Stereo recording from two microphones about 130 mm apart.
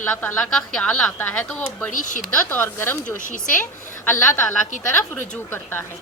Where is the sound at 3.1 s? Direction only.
90° left.